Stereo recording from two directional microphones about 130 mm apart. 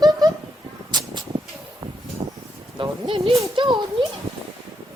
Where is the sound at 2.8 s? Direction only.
45° right (ahead or behind).